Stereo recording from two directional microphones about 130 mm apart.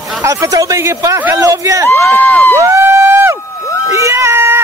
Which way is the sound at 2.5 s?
20° right (ahead or behind).